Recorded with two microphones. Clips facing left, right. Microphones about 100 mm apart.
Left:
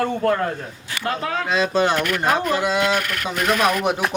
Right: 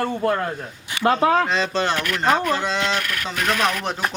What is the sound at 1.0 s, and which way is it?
Speech, 30° right (ahead or behind).